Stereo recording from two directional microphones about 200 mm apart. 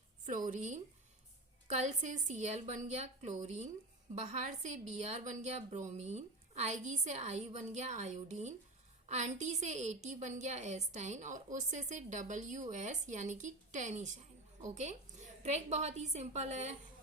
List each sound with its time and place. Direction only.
0.4 s a woman's voice: 40° right (ahead or behind)